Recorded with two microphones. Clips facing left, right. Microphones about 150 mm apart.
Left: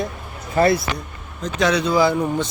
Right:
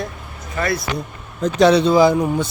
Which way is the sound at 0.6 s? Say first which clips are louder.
Left 7 dB; 35° left (ahead or behind).